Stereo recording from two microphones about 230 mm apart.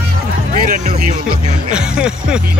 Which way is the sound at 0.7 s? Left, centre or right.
Right.